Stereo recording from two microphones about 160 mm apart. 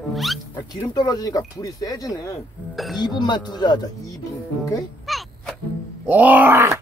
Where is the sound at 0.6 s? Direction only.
25° left (ahead or behind).